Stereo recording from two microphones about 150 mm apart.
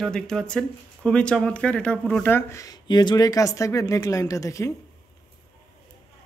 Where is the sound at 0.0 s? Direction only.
5° left (ahead or behind); by 4.7 s 20° left (ahead or behind).